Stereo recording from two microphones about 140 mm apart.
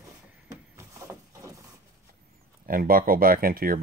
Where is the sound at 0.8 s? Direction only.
20° right (ahead or behind).